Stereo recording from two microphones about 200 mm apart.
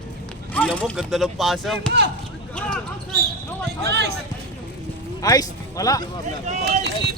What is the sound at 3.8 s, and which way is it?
Speech, 55° right (ahead or behind).